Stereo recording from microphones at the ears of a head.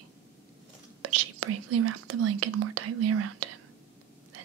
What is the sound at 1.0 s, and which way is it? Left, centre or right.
Speech, right.